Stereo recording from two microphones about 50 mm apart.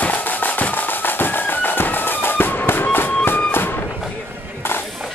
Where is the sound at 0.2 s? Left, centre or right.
Left.